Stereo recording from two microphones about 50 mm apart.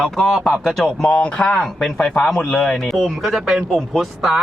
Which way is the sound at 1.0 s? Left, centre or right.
Left.